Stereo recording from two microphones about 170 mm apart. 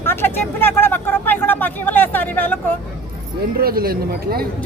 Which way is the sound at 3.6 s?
60° right (ahead or behind).